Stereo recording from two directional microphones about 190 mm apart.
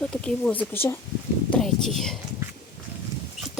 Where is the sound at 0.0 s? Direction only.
5° left (ahead or behind).